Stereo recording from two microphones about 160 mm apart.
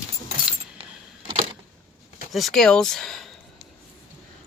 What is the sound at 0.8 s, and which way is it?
Keys jangling, 35° right (ahead or behind).